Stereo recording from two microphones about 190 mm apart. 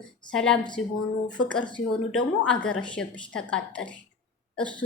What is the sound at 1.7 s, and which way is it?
A woman's voice, 5° left (ahead or behind).